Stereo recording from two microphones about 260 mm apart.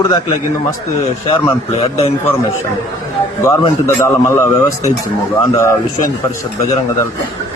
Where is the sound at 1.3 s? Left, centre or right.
Left.